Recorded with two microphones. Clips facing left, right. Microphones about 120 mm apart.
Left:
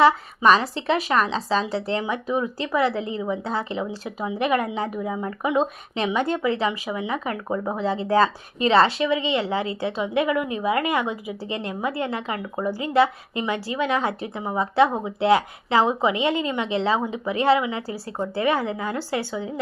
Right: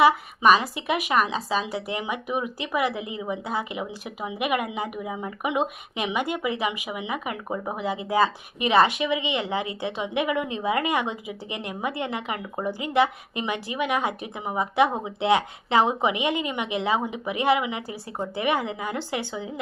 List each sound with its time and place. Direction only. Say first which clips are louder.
0.0 s a woman's voice: left 1 dB; 15° right (ahead or behind)